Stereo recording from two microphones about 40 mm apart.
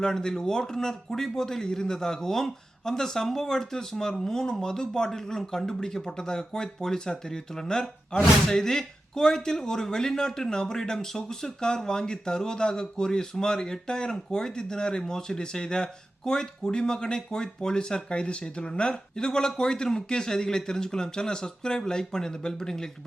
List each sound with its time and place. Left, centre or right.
0.0 s speech: centre
8.1 s speech: left
8.4 s speech: centre